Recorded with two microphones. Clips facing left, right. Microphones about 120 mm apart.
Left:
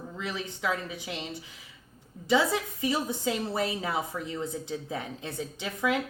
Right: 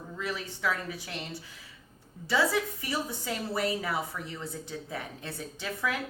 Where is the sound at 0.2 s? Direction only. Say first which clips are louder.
Even; 20° left (ahead or behind).